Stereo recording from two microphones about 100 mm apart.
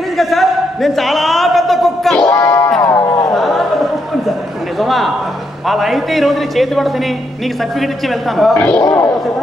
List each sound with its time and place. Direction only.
0.2 s a sound: centre (ahead or behind)
2.3 s music: 30° left (ahead or behind)
3.3 s a sound: centre (ahead or behind)
4.7 s a man's voice: centre (ahead or behind)
8.5 s a man's voice: 15° left (ahead or behind)
8.8 s speech: 30° left (ahead or behind)